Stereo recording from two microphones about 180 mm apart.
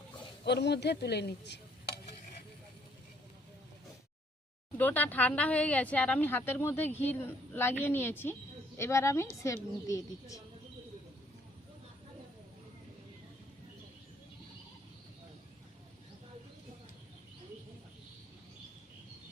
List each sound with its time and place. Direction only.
0.4 s a man's voice: 70° left (ahead or behind)
4.8 s a woman's voice: 10° left (ahead or behind)